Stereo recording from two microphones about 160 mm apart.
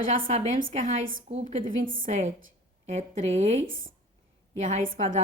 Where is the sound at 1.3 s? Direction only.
40° right (ahead or behind); by 2.1 s 60° right (ahead or behind).